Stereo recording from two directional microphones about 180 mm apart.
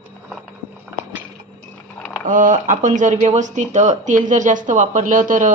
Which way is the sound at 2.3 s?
45° right (ahead or behind).